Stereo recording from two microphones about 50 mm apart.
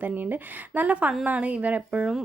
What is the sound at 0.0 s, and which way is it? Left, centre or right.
A woman's voice, right.